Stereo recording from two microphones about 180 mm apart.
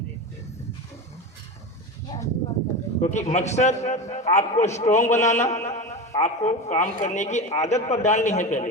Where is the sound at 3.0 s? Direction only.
40° left (ahead or behind).